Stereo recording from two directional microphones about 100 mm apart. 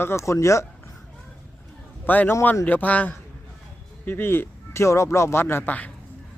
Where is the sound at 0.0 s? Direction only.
25° left (ahead or behind).